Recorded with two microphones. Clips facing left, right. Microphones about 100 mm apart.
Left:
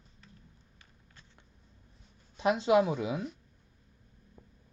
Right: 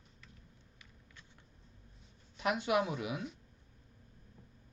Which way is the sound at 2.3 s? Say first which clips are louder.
Left 7 dB; 25° left (ahead or behind).